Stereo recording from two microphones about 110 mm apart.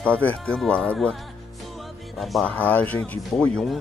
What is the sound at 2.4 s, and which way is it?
Speech, 15° left (ahead or behind).